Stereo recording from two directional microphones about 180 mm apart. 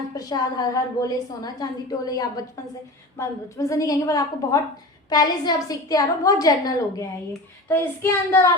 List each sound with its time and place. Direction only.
0.2 s a woman's voice: 20° left (ahead or behind)